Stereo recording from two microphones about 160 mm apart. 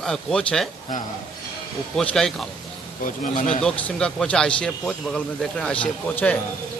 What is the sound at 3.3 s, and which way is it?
Speech, 55° left (ahead or behind).